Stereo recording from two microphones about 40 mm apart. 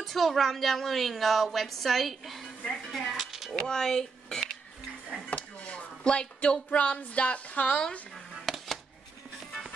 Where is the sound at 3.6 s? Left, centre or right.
Centre.